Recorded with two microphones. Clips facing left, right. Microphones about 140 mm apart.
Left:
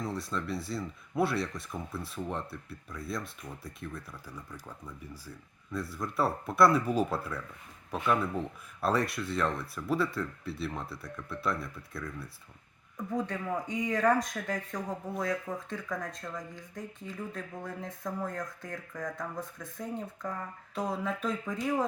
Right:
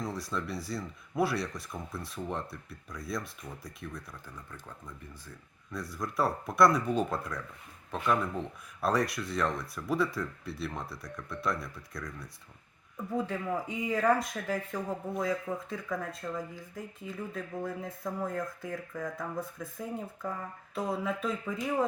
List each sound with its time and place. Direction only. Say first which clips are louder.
0.0 s speech: even; centre (ahead or behind)